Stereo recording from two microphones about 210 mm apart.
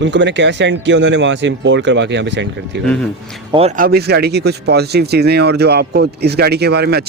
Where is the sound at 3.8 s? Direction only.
50° right (ahead or behind).